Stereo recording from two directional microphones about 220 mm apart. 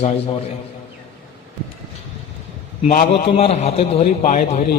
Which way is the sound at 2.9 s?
40° left (ahead or behind).